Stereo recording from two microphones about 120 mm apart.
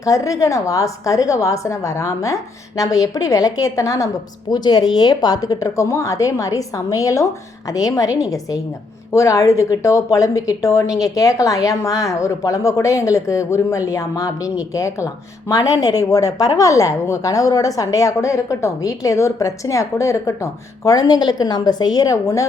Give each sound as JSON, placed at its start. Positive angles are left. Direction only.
{"t": 0.0, "sound": "a woman's voice", "side_deg": 25}